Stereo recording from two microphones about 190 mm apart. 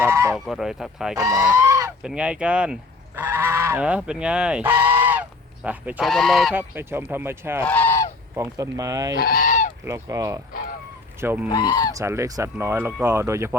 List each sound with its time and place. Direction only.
0.0 s speech: 15° right (ahead or behind)
0.3 s speech: centre (ahead or behind)
1.1 s speech: 15° right (ahead or behind)
1.4 s speech: 5° right (ahead or behind)
1.6 s goose: 15° right (ahead or behind)
2.0 s speech: 5° right (ahead or behind)
6.5 s speech: 10° right (ahead or behind)
7.6 s goose: 10° left (ahead or behind)
8.4 s speech: 15° right (ahead or behind)
9.1 s goose: 50° left (ahead or behind)
9.8 s speech: 15° right (ahead or behind)
11.4 s speech: 25° left (ahead or behind)
11.9 s speech: 15° right (ahead or behind)